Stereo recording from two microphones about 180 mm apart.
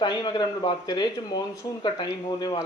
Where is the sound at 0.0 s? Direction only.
25° left (ahead or behind).